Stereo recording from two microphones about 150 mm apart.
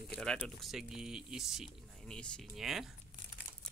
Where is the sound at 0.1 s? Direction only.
5° left (ahead or behind).